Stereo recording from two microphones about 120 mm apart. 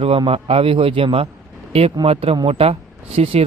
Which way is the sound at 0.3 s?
50° right (ahead or behind).